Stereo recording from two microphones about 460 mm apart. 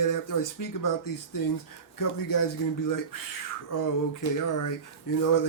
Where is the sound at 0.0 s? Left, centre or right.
Left.